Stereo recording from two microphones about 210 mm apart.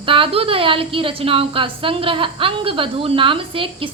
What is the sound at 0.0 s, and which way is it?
A woman's voice, 25° right (ahead or behind).